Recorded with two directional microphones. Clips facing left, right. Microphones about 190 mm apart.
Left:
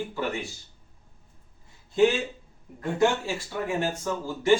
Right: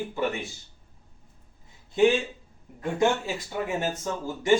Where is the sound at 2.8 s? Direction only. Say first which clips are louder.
Even; 15° right (ahead or behind).